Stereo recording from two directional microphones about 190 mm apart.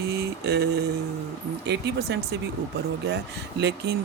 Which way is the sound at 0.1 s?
60° right (ahead or behind).